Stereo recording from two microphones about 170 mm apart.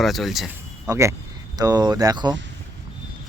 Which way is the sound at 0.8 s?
15° right (ahead or behind).